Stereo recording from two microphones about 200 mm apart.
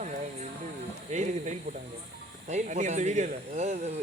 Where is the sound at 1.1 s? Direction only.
35° right (ahead or behind).